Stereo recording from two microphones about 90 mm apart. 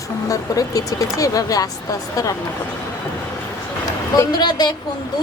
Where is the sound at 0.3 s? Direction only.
40° left (ahead or behind).